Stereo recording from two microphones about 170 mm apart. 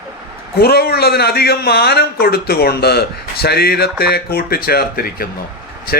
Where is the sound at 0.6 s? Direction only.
65° left (ahead or behind).